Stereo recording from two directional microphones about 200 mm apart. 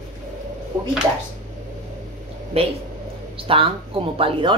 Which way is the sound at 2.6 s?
30° right (ahead or behind).